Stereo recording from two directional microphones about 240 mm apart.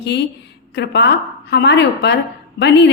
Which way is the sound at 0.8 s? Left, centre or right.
Left.